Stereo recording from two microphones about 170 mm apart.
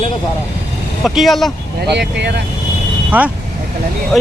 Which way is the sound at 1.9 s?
90° right.